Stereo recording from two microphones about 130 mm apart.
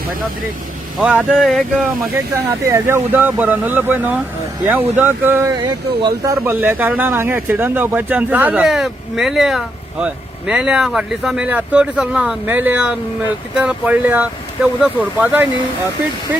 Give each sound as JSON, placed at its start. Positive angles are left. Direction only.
{"t": 0.9, "sound": "speech", "side_deg": -10}
{"t": 2.1, "sound": "speech", "side_deg": -20}